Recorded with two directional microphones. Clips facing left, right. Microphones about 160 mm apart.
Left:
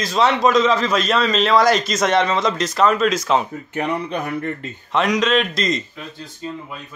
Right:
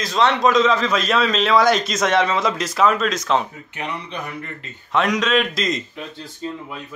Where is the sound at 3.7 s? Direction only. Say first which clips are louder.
Left 7 dB; 50° left (ahead or behind).